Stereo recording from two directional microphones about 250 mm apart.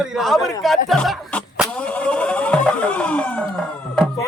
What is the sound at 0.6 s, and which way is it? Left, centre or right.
Vehicle, centre.